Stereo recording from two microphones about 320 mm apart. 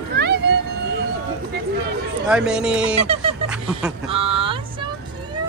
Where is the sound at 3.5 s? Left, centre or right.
Centre.